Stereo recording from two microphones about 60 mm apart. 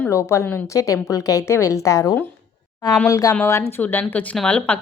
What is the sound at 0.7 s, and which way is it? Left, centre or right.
A woman's voice, left.